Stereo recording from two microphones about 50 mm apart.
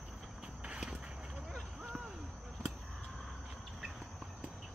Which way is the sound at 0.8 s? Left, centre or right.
Centre.